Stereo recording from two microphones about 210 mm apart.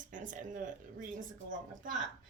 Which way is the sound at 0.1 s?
40° right (ahead or behind).